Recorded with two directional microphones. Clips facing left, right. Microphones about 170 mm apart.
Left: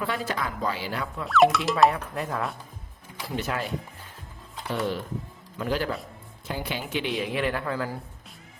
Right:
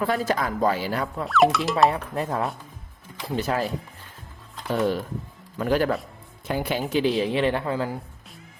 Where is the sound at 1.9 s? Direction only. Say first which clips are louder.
Right 4 dB; 30° right (ahead or behind).